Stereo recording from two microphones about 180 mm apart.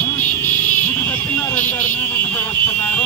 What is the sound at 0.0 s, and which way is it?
Vehicle, 10° left (ahead or behind).